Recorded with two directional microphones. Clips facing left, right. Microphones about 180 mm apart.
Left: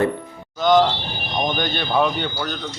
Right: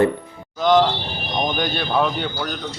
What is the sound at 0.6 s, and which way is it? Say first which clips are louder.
Speech: even; 5° right (ahead or behind).